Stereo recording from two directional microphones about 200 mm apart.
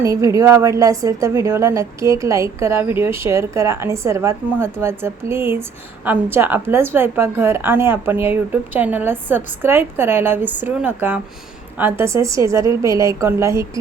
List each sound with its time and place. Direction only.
0.0 s a woman's voice: 15° right (ahead or behind)